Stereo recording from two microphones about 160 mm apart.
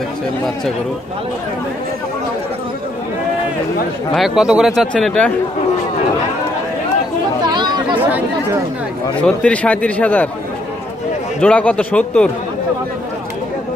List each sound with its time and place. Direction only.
4.1 s speech: centre (ahead or behind)
7.4 s chatter: 25° right (ahead or behind)
9.2 s a man's voice: 10° left (ahead or behind)
11.4 s a man's voice: 10° left (ahead or behind)